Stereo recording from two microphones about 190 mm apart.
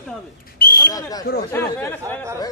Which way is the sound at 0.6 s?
50° left (ahead or behind).